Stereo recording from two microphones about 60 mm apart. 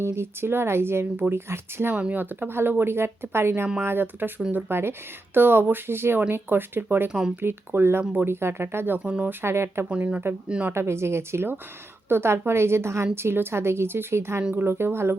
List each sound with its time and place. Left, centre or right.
0.0 s a woman's voice: right
2.0 s speech: right
2.3 s speech: right
7.1 s speech: centre
7.4 s a woman's voice: right
9.9 s speech: right
10.7 s a woman's voice: right